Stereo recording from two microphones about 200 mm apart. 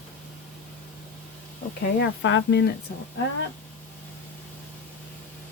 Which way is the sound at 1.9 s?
60° left (ahead or behind).